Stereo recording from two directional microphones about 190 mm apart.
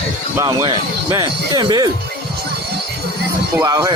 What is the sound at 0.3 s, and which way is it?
Speech, 20° right (ahead or behind).